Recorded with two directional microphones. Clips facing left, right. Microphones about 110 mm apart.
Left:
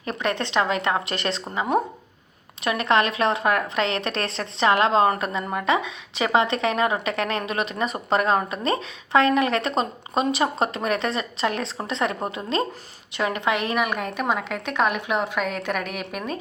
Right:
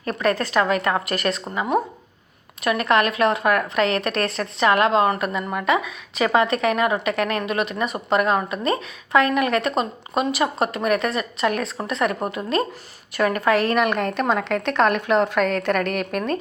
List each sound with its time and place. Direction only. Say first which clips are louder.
0.0 s a woman's voice: right 4 dB; 25° left (ahead or behind)
2.6 s a woman's voice: right 2 dB; 30° left (ahead or behind)
13.7 s a woman's voice: right 4 dB; 5° left (ahead or behind)